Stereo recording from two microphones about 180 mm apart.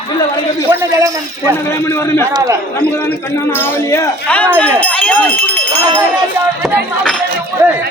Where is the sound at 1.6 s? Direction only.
15° left (ahead or behind).